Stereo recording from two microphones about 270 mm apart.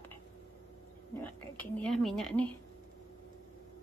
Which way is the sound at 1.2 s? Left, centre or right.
Centre.